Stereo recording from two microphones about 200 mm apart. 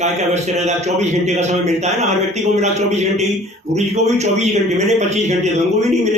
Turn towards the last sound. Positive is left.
turn(degrees=-35)  # may be behind; listen again after turning